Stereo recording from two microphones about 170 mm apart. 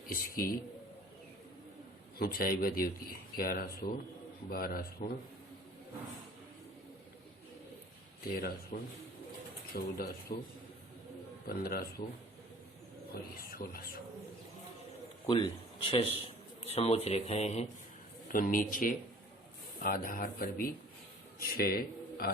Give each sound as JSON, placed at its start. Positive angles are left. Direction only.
{"t": 0.1, "sound": "speech", "side_deg": 60}
{"t": 2.1, "sound": "speech", "side_deg": 60}
{"t": 8.4, "sound": "speech", "side_deg": 60}
{"t": 11.4, "sound": "speech", "side_deg": 60}
{"t": 13.4, "sound": "speech", "side_deg": 60}
{"t": 15.3, "sound": "speech", "side_deg": 30}
{"t": 18.3, "sound": "a man's voice", "side_deg": 55}